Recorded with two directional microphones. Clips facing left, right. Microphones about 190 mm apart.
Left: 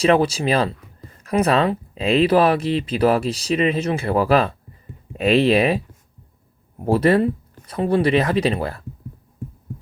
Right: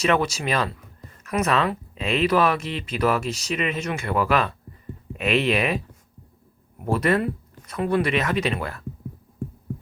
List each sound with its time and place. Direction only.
0.0 s speech: 30° left (ahead or behind)